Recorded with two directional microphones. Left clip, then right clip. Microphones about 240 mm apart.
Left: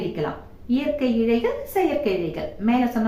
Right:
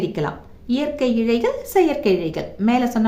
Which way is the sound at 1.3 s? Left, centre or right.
Right.